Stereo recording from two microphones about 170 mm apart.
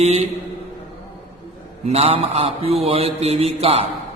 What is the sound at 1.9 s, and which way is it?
Mantra, 35° right (ahead or behind).